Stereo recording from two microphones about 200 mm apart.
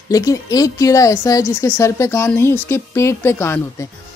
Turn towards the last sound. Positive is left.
turn(degrees=10)  # may be behind; listen again after turning